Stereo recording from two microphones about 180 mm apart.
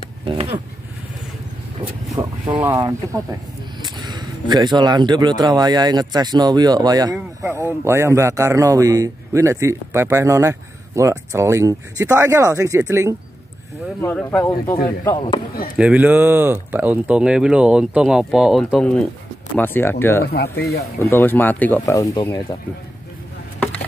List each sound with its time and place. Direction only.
2.1 s speech: 25° right (ahead or behind)
7.2 s speech: 10° right (ahead or behind)
14.0 s speech: 10° left (ahead or behind)
15.1 s speech: 30° left (ahead or behind)
15.7 s speech: 5° right (ahead or behind); by 20.2 s 10° left (ahead or behind)
20.2 s speech: 60° left (ahead or behind)
21.0 s speech: 10° left (ahead or behind)